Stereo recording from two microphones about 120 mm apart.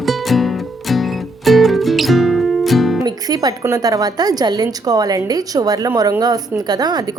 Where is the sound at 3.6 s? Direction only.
30° right (ahead or behind).